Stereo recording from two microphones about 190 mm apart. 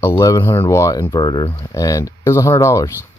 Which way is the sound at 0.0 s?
15° left (ahead or behind).